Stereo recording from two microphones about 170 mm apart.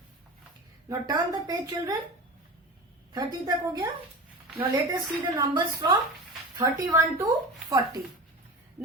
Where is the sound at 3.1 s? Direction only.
25° right (ahead or behind).